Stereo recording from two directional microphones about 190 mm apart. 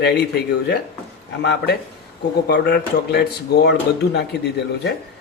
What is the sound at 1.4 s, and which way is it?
Speech, 65° left (ahead or behind).